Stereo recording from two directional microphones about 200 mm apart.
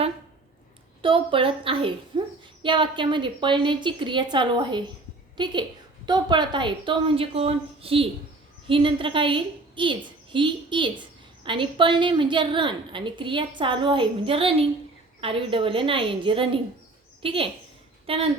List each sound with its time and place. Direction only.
1.0 s a woman's voice: 25° right (ahead or behind)